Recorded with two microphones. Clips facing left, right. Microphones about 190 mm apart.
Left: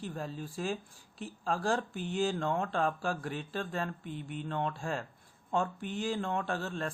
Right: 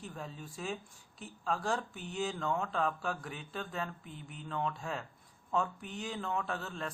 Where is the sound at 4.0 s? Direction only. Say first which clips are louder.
Left 8 dB; 80° left.